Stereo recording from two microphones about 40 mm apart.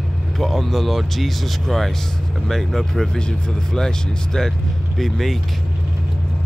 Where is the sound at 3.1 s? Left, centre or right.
Centre.